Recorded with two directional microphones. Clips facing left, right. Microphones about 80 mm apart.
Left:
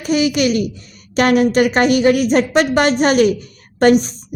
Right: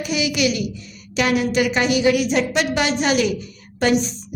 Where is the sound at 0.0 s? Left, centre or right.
Left.